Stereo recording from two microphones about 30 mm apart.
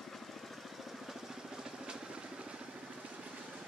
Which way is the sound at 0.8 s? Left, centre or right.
Centre.